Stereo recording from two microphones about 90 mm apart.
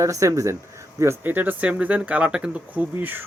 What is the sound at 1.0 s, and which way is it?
Speech, 25° right (ahead or behind).